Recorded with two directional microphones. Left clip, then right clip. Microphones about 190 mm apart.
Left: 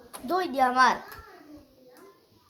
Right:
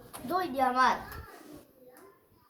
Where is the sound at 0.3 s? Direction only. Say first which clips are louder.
Left 4 dB; 35° left (ahead or behind).